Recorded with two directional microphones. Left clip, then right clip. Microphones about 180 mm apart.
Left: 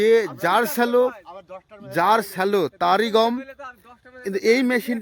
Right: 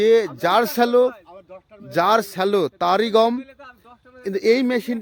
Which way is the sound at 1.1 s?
40° left (ahead or behind).